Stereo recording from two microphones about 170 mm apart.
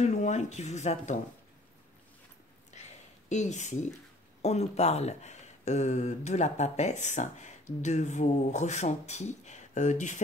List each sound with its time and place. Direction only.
0.0 s speech: 40° left (ahead or behind)
2.7 s a sound: 40° left (ahead or behind)
4.4 s speech: 40° left (ahead or behind)